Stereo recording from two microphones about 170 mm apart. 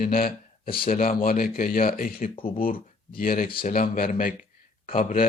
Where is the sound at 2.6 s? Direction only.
55° left (ahead or behind).